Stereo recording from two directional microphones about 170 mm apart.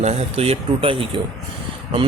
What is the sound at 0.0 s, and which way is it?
A man's voice, 40° right (ahead or behind).